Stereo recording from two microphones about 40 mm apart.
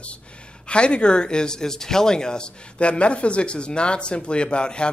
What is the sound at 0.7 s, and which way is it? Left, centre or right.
Speech, left.